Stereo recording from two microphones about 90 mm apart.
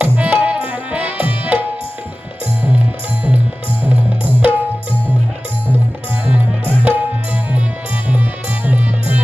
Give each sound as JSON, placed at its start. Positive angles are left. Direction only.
{"t": 0.0, "sound": "music", "side_deg": -20}
{"t": 3.8, "sound": "music", "side_deg": -20}
{"t": 6.2, "sound": "music", "side_deg": -20}
{"t": 8.6, "sound": "music", "side_deg": -20}